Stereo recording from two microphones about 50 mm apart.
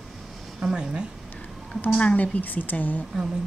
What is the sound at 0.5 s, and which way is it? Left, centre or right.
Speech, centre.